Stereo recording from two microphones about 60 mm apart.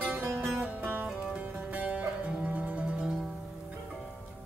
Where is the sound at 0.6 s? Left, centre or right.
Right; by 3.3 s centre.